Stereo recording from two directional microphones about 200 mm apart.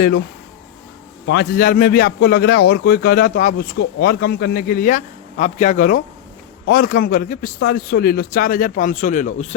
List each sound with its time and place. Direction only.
1.3 s a man's voice: 50° left (ahead or behind)